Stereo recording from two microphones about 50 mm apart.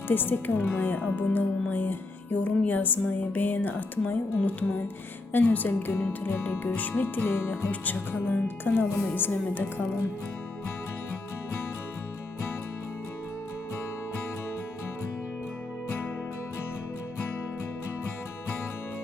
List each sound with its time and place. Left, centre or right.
0.1 s speech: left
5.3 s speech: left
7.7 s speech: left